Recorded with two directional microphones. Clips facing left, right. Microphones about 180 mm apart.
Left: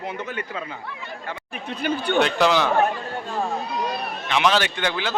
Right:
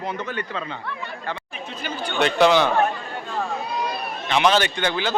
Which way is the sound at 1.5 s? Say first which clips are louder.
Left 5 dB; 60° left (ahead or behind).